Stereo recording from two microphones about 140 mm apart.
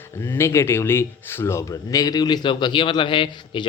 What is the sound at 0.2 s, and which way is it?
Speech, 20° left (ahead or behind).